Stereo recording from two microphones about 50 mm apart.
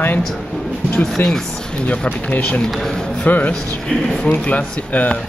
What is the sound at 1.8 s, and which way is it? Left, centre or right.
Speech, left.